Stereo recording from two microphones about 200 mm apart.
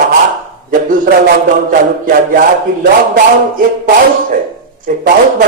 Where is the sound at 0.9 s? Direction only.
45° right (ahead or behind).